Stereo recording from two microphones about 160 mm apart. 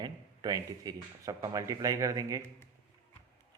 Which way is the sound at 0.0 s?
25° right (ahead or behind).